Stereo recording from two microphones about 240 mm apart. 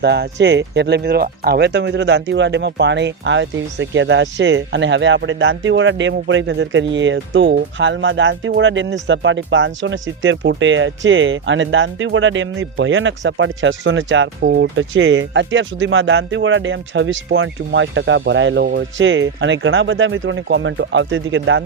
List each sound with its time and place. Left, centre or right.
0.0 s speech: right